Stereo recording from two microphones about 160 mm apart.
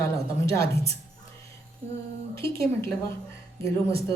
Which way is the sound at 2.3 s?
20° left (ahead or behind).